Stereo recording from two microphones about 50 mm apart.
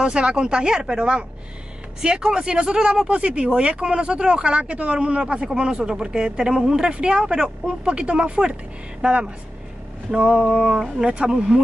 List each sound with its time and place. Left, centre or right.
0.0 s speech: centre